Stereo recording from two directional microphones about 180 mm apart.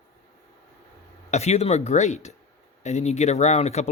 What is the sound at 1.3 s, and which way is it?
Speech, 40° left (ahead or behind).